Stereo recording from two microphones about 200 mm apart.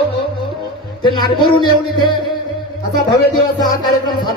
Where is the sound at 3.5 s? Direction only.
20° left (ahead or behind).